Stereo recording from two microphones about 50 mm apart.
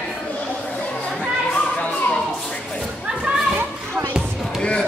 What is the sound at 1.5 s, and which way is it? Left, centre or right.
Children playing, left.